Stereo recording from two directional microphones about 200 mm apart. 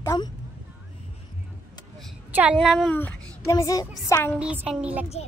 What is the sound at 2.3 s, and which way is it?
A child's voice, 5° right (ahead or behind).